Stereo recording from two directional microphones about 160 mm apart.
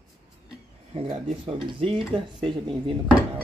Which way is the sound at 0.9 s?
35° right (ahead or behind).